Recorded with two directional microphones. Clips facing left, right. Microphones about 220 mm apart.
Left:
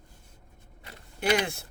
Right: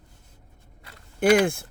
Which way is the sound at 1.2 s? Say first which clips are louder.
Right 8 dB; 50° right (ahead or behind).